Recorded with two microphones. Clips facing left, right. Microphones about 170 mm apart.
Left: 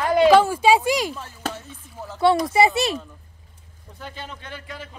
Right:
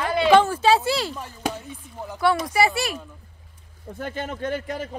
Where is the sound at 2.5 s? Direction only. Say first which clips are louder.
Left 3 dB; 20° left (ahead or behind).